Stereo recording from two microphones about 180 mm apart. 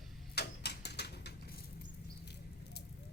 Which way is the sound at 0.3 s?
65° left (ahead or behind).